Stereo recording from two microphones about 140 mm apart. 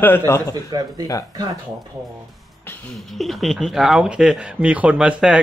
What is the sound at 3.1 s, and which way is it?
Speech, centre (ahead or behind).